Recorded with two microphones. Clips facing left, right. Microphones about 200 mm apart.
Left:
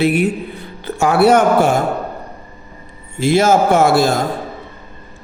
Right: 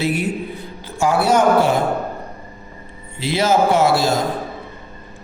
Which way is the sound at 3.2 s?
50° left (ahead or behind).